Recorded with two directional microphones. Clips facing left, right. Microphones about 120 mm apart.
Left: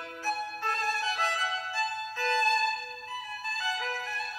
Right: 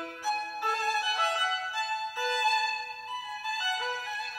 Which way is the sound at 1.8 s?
15° right (ahead or behind).